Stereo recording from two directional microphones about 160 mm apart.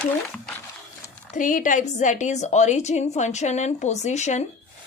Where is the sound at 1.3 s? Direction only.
55° left (ahead or behind).